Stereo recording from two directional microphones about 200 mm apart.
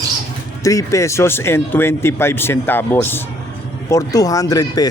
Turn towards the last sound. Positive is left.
turn(degrees=20)  # may be behind; listen again after turning